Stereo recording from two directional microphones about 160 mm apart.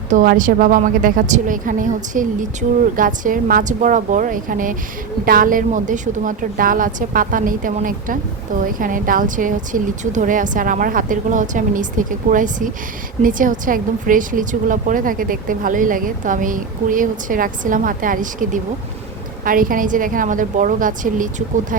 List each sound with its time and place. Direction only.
0.1 s a woman's voice: 55° right (ahead or behind)